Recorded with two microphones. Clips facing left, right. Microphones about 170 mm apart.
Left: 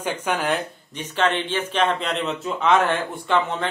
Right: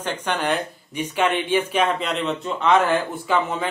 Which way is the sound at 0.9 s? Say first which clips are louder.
Right 1 dB; 10° right (ahead or behind).